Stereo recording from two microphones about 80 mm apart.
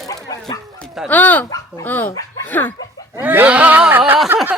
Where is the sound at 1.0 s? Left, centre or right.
Left.